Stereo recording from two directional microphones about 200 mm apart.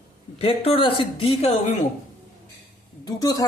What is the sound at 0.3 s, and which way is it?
Speech, 30° left (ahead or behind).